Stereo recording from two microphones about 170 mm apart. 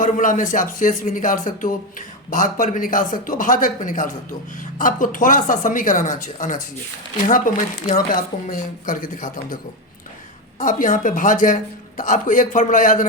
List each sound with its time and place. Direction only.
0.0 s speech: 50° left (ahead or behind)
10.6 s speech: 50° left (ahead or behind)